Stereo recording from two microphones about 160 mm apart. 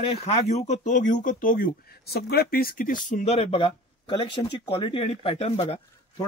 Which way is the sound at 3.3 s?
35° left (ahead or behind).